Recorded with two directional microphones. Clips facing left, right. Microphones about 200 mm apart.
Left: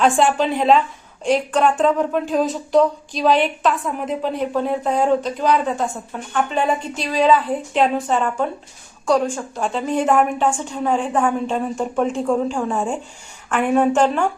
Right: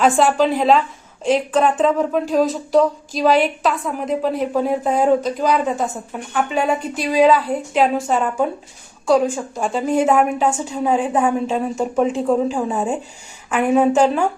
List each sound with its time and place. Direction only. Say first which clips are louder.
0.0 s a woman's voice: right 2 dB; centre (ahead or behind)